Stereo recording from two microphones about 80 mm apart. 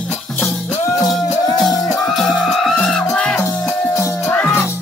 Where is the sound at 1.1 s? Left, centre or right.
Centre.